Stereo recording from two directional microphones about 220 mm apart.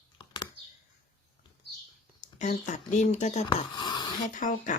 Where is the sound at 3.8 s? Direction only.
20° left (ahead or behind).